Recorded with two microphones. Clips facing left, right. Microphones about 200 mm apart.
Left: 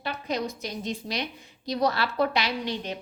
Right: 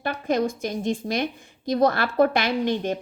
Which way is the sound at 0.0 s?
50° right (ahead or behind).